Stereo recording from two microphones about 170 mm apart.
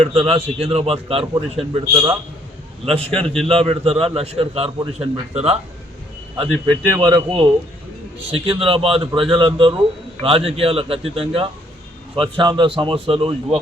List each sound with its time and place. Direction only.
0.0 s a man's voice: 35° right (ahead or behind)
1.9 s a man's voice: 20° right (ahead or behind)
2.8 s a man's voice: 35° right (ahead or behind)